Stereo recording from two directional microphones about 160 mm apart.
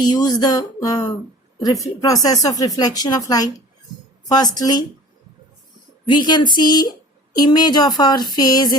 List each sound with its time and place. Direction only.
0.0 s speech: 25° left (ahead or behind)
4.5 s speech: 25° left (ahead or behind)
6.1 s speech: 30° left (ahead or behind)